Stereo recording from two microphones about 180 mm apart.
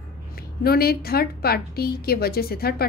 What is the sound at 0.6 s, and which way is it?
A woman's voice, 60° left (ahead or behind).